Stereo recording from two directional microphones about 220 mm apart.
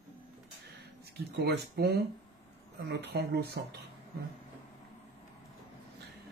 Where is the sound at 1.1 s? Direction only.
45° right (ahead or behind).